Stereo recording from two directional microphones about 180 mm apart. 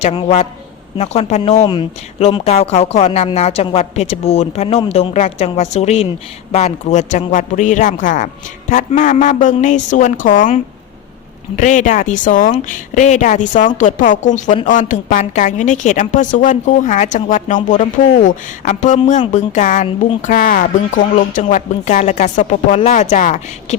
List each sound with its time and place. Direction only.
0.1 s speech: 30° left (ahead or behind)
1.6 s a woman's voice: 25° left (ahead or behind); by 10.5 s 50° left (ahead or behind)
11.5 s a woman's voice: 45° left (ahead or behind)